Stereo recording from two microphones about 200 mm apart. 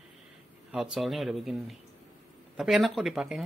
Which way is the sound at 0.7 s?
Centre (ahead or behind).